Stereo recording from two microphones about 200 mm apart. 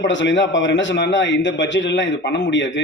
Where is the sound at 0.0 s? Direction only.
65° left (ahead or behind).